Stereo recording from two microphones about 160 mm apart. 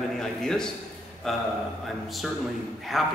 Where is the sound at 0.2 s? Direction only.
5° left (ahead or behind).